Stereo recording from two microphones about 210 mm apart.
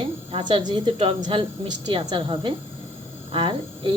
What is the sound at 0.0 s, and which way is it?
A woman's voice, 25° right (ahead or behind).